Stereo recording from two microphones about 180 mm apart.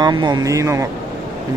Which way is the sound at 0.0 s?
25° right (ahead or behind).